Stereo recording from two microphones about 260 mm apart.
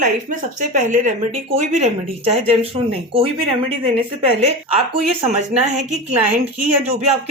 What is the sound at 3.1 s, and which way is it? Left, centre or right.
Speech, right.